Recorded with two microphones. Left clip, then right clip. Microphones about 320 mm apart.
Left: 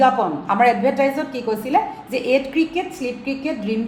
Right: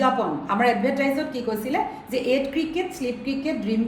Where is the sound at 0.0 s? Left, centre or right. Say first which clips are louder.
Left 6 dB; centre.